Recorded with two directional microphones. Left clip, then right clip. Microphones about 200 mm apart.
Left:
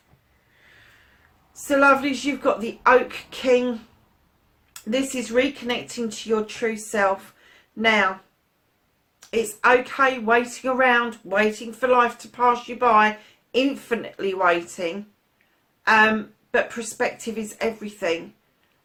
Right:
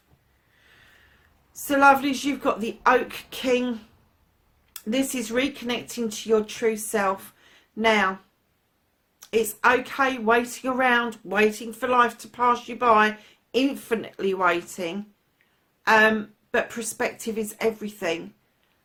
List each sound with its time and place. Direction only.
1.6 s speech: 45° right (ahead or behind)
9.2 s speech: 45° right (ahead or behind)